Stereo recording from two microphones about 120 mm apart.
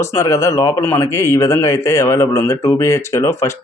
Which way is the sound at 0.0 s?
25° left (ahead or behind).